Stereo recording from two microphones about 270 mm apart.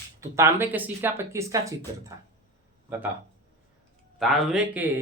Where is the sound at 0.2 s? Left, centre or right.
Centre.